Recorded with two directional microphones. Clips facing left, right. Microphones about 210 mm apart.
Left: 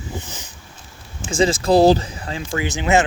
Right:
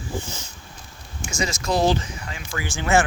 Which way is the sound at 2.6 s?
20° left (ahead or behind).